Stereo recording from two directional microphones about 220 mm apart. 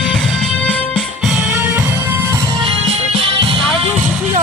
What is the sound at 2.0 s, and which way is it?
Music, 10° right (ahead or behind).